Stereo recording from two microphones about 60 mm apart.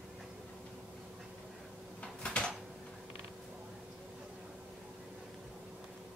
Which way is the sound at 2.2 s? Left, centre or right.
Centre.